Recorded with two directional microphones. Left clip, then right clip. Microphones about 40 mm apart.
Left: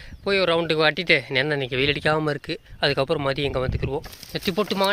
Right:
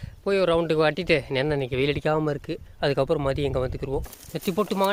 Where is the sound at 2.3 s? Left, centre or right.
Centre.